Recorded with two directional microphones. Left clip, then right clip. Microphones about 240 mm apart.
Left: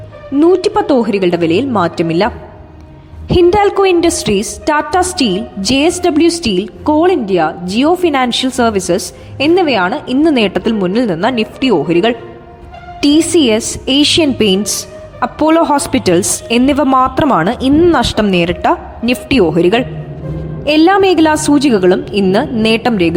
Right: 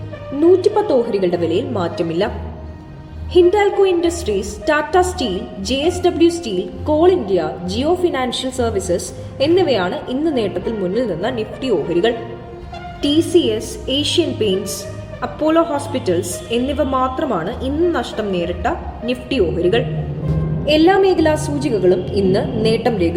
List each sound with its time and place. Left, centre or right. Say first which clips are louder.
0.3 s a woman's voice: left 3 dB; left
3.3 s a woman's voice: left 4 dB; left